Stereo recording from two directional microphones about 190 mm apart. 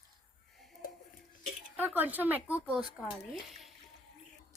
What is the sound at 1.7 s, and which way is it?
A woman's voice, 10° right (ahead or behind).